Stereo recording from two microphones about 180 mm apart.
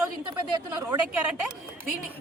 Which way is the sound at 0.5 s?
20° right (ahead or behind).